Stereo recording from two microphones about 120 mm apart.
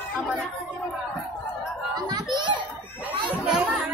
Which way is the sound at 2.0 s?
35° right (ahead or behind).